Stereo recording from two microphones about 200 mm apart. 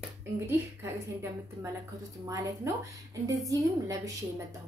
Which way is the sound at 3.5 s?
15° right (ahead or behind).